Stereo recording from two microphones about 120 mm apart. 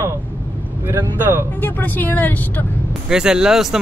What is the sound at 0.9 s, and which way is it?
Speech, 20° right (ahead or behind).